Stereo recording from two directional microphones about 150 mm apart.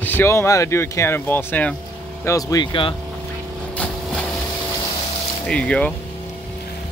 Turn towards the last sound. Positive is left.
turn(degrees=10)  # may be behind; listen again after turning